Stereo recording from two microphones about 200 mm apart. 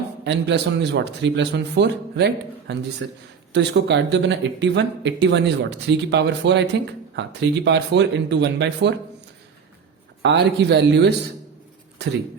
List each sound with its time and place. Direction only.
0.3 s speech: 60° right (ahead or behind)
10.2 s speech: 60° right (ahead or behind)